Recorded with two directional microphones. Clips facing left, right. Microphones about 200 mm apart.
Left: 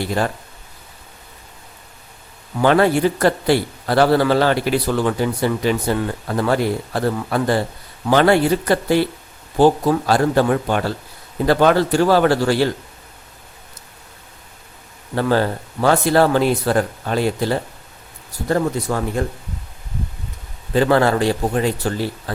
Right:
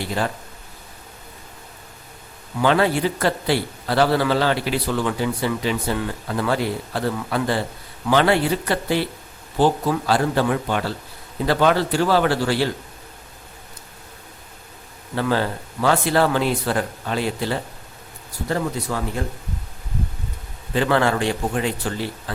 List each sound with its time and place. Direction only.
2.6 s a man's voice: 45° left (ahead or behind)
15.1 s a man's voice: 45° left (ahead or behind)
20.7 s a man's voice: 40° left (ahead or behind)